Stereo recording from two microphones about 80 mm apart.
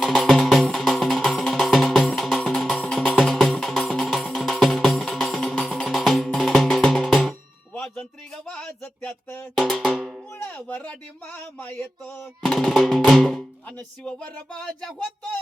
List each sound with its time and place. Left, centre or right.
0.0 s music: centre
8.4 s a sound: centre
9.6 s drum: centre
10.3 s music: left
10.8 s a sound: centre
12.4 s music: centre
13.7 s speech: centre